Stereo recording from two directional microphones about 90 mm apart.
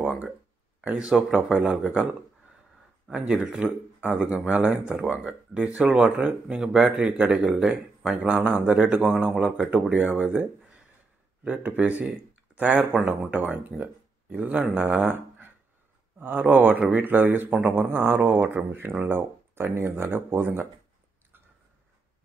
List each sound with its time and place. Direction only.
0.8 s speech: 10° right (ahead or behind)
3.1 s speech: 10° right (ahead or behind)
7.4 s speech: 5° right (ahead or behind); by 20.6 s 25° right (ahead or behind)